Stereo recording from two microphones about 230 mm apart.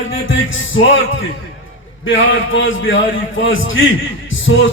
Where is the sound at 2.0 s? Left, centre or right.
Left.